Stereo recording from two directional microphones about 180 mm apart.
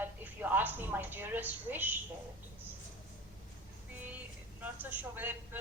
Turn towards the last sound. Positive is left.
turn(degrees=-10)  # may be behind; listen again after turning